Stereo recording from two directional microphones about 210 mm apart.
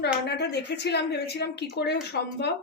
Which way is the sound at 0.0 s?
55° left (ahead or behind).